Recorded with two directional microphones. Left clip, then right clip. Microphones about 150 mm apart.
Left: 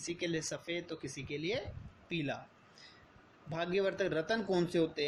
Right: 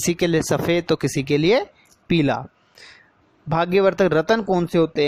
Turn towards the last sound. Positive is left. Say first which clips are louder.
# right 13 dB
turn(degrees=-60)  # may be behind; listen again after turning